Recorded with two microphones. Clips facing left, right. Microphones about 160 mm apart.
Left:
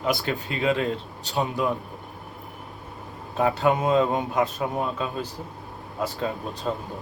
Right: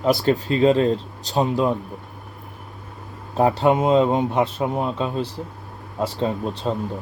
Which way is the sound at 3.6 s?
25° right (ahead or behind).